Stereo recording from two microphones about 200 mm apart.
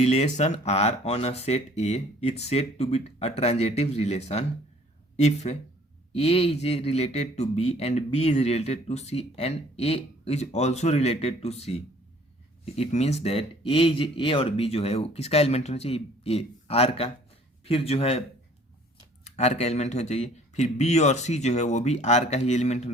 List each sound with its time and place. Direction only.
0.0 s speech: 35° left (ahead or behind)
19.2 s speech: 30° left (ahead or behind)